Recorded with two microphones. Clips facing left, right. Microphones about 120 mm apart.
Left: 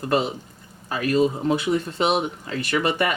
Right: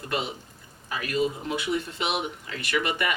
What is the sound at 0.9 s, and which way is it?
Speech, 35° left (ahead or behind).